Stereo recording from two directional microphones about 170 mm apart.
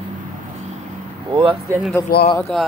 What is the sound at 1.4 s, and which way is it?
Speech, 15° right (ahead or behind).